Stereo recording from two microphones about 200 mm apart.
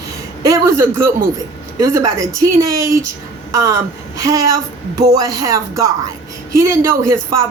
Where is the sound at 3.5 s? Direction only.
15° right (ahead or behind).